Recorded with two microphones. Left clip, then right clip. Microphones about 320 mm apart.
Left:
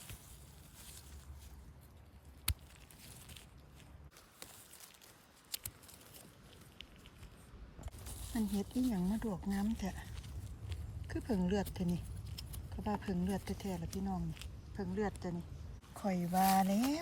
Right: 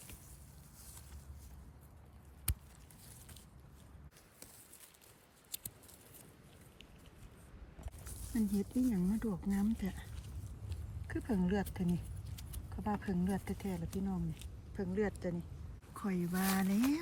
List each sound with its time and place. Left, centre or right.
8.3 s speech: centre